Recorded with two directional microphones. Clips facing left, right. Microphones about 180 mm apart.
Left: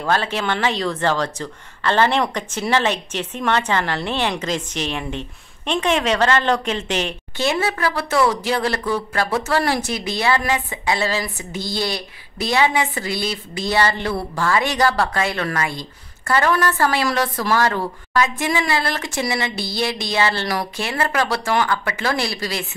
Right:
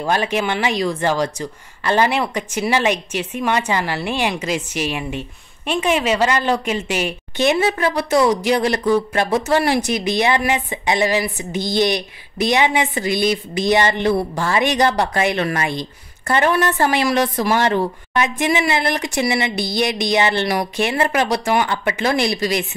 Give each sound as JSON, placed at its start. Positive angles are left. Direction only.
{"t": 0.0, "sound": "a woman's voice", "side_deg": -15}